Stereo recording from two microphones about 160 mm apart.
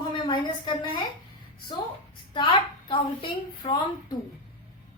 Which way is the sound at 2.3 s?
30° left (ahead or behind).